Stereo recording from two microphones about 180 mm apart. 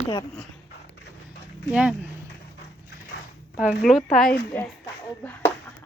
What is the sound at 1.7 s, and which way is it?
Speech, 5° right (ahead or behind).